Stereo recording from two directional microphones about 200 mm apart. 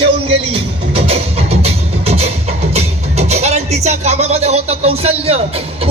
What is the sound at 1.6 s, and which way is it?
Music, 30° right (ahead or behind).